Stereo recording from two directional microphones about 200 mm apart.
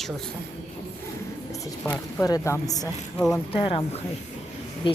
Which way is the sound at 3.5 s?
30° left (ahead or behind).